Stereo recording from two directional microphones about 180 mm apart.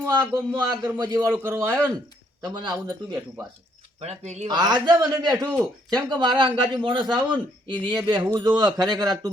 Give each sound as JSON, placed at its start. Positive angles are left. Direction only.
{"t": 0.0, "sound": "a man's voice", "side_deg": -20}
{"t": 2.4, "sound": "speech", "side_deg": -25}
{"t": 4.0, "sound": "speech", "side_deg": -40}
{"t": 4.4, "sound": "speech", "side_deg": -20}